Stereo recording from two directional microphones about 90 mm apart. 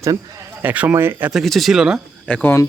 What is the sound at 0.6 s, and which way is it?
Speech, 20° right (ahead or behind).